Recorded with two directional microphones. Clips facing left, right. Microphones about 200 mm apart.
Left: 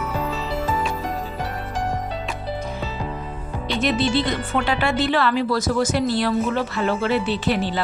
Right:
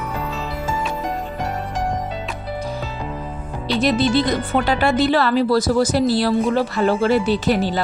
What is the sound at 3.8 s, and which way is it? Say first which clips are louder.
Speech: right 3 dB; 40° right (ahead or behind).